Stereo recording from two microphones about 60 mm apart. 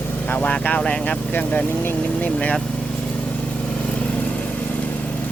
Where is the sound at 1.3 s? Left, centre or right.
Left.